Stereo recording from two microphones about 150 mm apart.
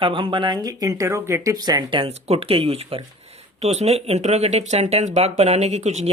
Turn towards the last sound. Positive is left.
turn(degrees=-50)  # may be behind; listen again after turning